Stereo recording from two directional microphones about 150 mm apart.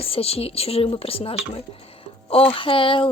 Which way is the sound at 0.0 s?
40° left (ahead or behind).